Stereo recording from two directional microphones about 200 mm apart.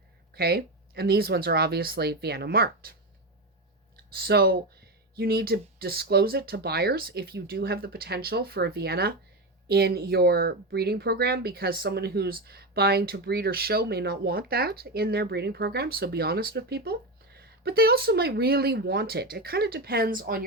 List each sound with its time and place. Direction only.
0.3 s speech: 50° right (ahead or behind)
4.1 s speech: 50° right (ahead or behind)